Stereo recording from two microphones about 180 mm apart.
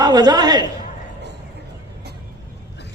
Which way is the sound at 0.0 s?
25° right (ahead or behind).